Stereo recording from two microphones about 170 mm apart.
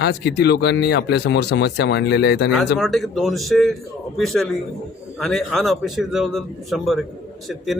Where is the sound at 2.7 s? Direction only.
Centre (ahead or behind).